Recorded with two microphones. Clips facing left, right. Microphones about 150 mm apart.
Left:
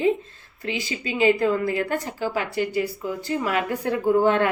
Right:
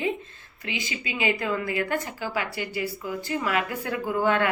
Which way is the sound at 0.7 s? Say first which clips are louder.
Left 5 dB; 40° left (ahead or behind).